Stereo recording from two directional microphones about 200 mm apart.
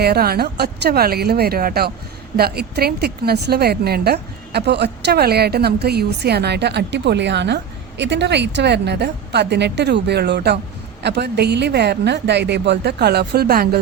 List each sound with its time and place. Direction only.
0.0 s a woman's voice: 50° right (ahead or behind)